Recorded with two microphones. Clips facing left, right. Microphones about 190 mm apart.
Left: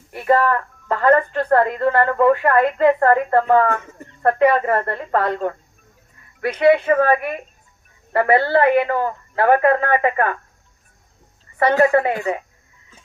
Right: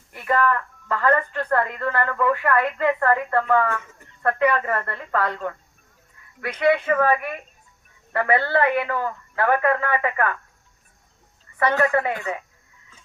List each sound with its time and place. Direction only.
0.1 s a woman's voice: 30° left (ahead or behind)
4.3 s a woman's voice: 30° left (ahead or behind)
11.8 s speech: 30° left (ahead or behind)